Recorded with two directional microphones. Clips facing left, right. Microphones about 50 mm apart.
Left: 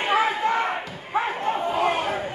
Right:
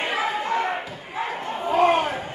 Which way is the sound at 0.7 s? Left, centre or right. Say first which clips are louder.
Even; centre.